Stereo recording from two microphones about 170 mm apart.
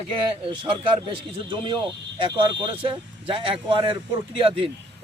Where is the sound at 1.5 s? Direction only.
30° right (ahead or behind).